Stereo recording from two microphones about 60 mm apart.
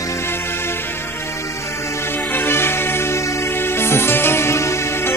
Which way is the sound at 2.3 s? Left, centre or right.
Left.